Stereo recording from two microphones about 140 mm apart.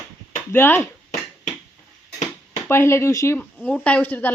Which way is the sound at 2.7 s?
20° left (ahead or behind).